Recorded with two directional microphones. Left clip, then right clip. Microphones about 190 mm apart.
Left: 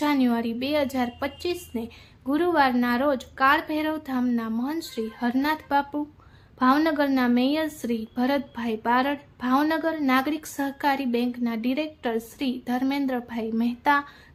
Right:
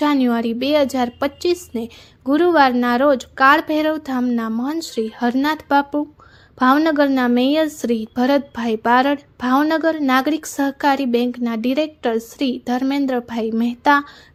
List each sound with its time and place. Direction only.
0.0 s a woman's voice: 35° right (ahead or behind)